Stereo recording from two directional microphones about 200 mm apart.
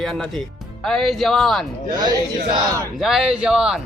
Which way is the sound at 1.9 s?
20° right (ahead or behind).